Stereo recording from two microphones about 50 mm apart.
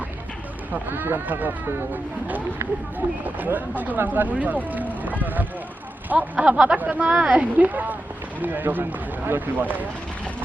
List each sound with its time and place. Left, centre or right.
0.9 s speech: right
6.7 s speech: right